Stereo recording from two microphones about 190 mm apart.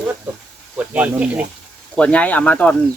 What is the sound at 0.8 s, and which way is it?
Speech, 5° right (ahead or behind).